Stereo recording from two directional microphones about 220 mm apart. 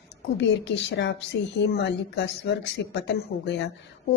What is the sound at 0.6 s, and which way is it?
A woman's voice, 55° left (ahead or behind).